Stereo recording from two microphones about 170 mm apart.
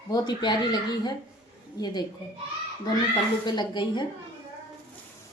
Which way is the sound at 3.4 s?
25° left (ahead or behind).